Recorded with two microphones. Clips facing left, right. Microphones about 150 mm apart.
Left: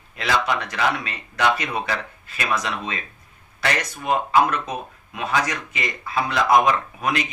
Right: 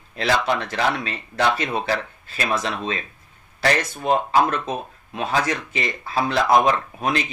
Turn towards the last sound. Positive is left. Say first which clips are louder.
# right 1 dB
turn(degrees=-30)  # may be behind; listen again after turning